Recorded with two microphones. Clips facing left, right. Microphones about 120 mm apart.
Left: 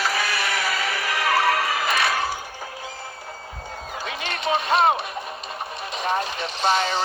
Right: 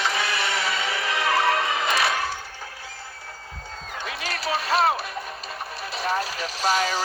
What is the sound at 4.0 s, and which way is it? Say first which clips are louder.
Music: left 2 dB; centre (ahead or behind).